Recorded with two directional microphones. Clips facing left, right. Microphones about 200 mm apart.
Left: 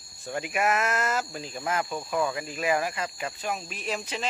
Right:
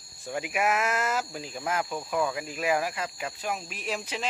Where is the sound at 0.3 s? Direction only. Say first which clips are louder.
Left 1 dB; 5° right (ahead or behind).